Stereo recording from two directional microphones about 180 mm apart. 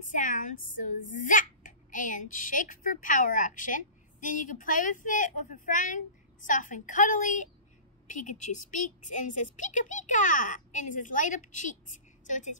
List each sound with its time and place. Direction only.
0.0 s a child's voice: 45° left (ahead or behind)